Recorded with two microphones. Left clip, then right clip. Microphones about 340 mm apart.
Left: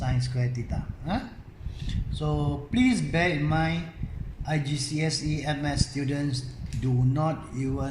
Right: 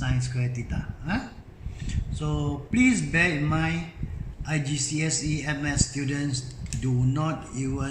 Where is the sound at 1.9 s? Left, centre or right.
Centre.